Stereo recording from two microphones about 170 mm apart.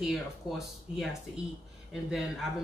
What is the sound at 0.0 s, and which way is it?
Speech, centre (ahead or behind).